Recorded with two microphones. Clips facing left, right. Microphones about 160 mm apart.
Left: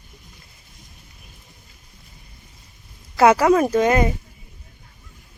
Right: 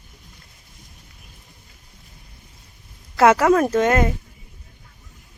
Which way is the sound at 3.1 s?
Centre (ahead or behind).